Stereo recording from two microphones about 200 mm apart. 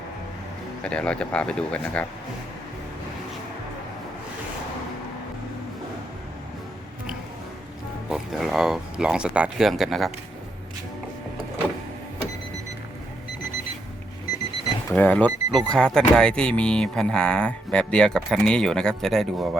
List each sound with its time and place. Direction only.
0.8 s speech: 5° left (ahead or behind)
8.1 s speech: centre (ahead or behind)
14.8 s speech: 10° left (ahead or behind)